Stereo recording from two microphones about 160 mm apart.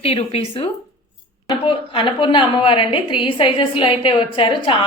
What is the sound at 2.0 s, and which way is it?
A woman's voice, 30° left (ahead or behind).